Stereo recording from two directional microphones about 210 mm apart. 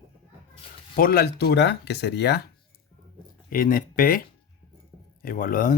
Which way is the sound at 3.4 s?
40° left (ahead or behind).